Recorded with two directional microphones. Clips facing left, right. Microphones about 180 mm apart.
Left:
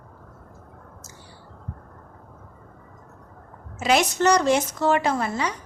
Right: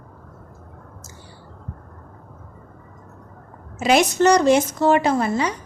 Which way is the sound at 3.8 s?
15° right (ahead or behind).